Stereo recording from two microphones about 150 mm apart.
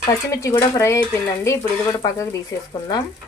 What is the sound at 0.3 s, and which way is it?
Stir, 20° left (ahead or behind).